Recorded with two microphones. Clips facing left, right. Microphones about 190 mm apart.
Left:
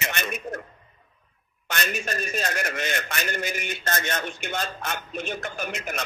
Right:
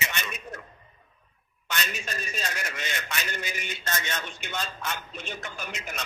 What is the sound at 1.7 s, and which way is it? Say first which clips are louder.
A man's voice: left 5 dB; 50° left (ahead or behind).